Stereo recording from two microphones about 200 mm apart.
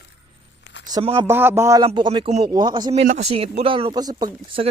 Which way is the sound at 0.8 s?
20° right (ahead or behind).